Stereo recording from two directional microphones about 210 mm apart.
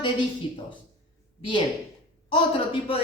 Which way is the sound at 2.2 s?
25° left (ahead or behind).